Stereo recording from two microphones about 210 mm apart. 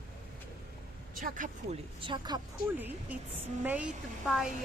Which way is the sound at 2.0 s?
20° right (ahead or behind).